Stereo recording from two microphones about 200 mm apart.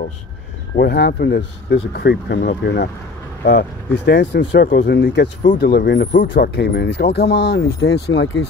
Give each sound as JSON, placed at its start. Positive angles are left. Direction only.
{"t": 0.7, "sound": "speech", "side_deg": 55}
{"t": 5.4, "sound": "speech", "side_deg": 50}